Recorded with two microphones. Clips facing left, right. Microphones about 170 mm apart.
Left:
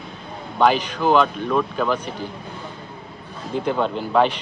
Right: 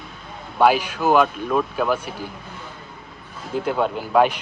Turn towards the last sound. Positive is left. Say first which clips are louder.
# right 1 dB
turn(degrees=-10)  # may be behind; listen again after turning